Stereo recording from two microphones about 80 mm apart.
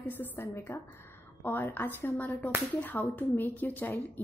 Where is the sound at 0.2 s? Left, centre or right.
Left.